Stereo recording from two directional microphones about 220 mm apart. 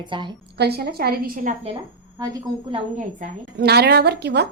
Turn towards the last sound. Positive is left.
turn(degrees=-50)  # may be behind; listen again after turning